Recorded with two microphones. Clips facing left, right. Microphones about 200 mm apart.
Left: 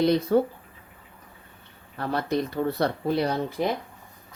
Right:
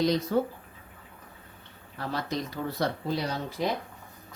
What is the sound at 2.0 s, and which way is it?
Speech, 60° left (ahead or behind).